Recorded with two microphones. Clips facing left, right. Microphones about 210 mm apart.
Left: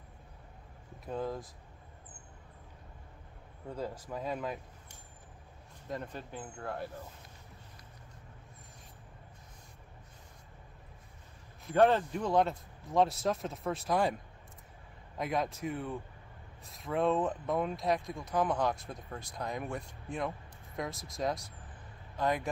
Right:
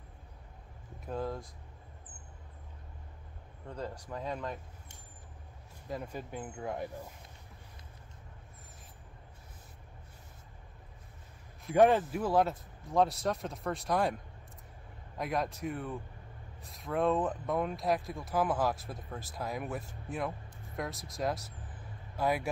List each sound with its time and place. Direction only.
1.0 s speech: centre (ahead or behind)
3.6 s speech: 5° left (ahead or behind)
5.9 s speech: 5° right (ahead or behind)
11.7 s speech: 10° right (ahead or behind)
15.1 s speech: centre (ahead or behind)